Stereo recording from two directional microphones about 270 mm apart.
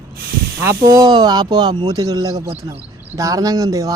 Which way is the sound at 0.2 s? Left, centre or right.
Right.